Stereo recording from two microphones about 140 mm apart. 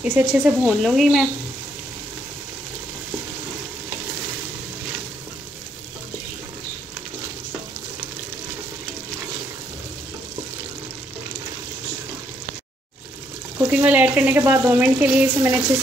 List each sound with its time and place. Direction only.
0.0 s speech: 10° right (ahead or behind)
13.6 s speech: 15° right (ahead or behind)